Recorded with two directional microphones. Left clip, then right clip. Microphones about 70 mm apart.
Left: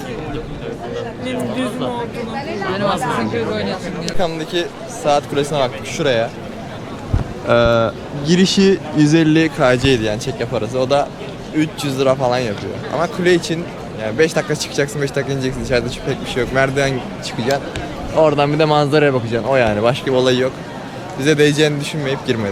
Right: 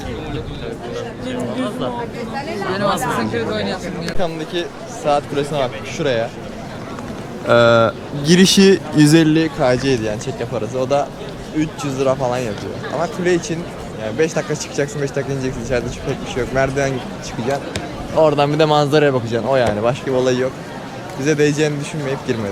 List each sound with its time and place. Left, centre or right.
2.3 s speech: right
4.0 s speech: left
7.4 s speech: right
9.6 s speech: left
18.1 s speech: centre
19.7 s speech: left